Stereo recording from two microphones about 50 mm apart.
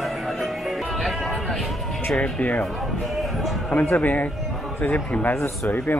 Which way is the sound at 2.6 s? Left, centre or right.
Centre.